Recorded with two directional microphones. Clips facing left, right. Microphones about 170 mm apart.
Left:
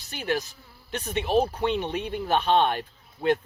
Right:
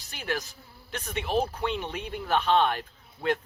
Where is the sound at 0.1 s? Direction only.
25° left (ahead or behind).